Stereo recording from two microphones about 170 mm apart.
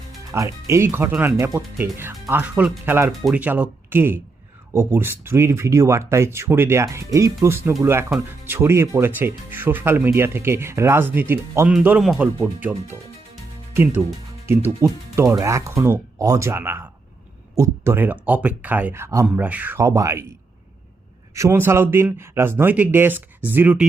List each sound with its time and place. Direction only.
0.3 s speech: 20° right (ahead or behind)
14.4 s speech: 15° right (ahead or behind)
21.3 s speech: 15° right (ahead or behind)